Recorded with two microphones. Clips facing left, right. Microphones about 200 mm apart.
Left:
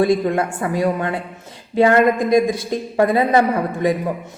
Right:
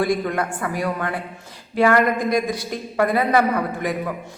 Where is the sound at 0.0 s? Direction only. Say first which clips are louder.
Left 5 dB; 25° left (ahead or behind).